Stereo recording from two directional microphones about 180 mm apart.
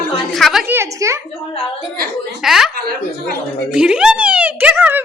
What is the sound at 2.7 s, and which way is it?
Speech, 55° right (ahead or behind).